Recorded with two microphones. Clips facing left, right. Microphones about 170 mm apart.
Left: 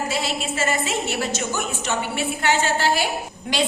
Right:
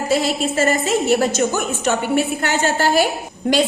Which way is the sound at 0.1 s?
40° right (ahead or behind).